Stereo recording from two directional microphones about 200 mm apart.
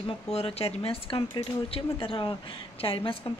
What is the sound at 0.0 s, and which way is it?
Speech, 30° left (ahead or behind).